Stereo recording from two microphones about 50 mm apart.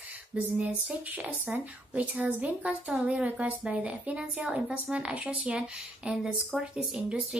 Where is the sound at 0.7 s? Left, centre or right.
Right.